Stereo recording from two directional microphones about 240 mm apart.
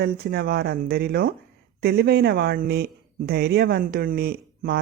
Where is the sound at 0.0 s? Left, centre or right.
Right.